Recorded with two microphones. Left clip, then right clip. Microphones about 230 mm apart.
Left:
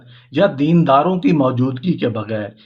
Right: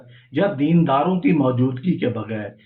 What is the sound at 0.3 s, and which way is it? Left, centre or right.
A man's voice, left.